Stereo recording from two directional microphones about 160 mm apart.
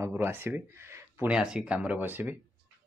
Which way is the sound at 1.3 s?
5° right (ahead or behind).